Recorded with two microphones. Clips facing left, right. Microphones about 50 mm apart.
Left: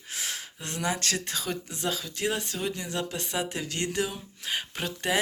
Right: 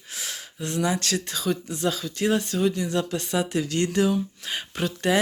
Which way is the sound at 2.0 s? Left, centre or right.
Centre.